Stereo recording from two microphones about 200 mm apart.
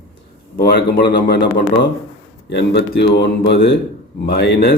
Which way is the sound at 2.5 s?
60° left (ahead or behind).